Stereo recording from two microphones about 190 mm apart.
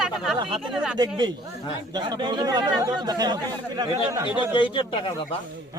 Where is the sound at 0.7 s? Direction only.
5° right (ahead or behind).